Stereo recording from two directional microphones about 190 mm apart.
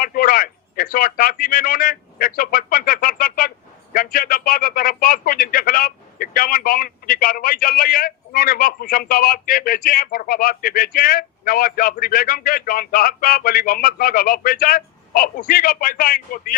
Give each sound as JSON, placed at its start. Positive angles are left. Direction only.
{"t": 0.0, "sound": "a man's voice", "side_deg": 50}